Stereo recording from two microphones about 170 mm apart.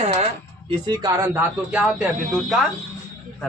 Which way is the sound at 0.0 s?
40° right (ahead or behind).